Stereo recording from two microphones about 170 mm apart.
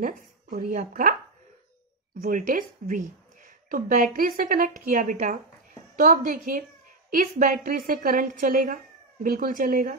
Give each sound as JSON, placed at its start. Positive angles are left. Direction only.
{"t": 0.0, "sound": "a woman's voice", "side_deg": -50}
{"t": 2.2, "sound": "speech", "side_deg": -55}